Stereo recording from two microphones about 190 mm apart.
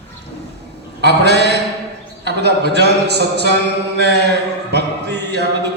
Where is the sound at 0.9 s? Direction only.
60° right (ahead or behind).